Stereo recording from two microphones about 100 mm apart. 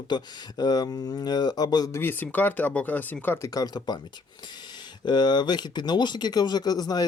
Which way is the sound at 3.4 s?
40° left (ahead or behind).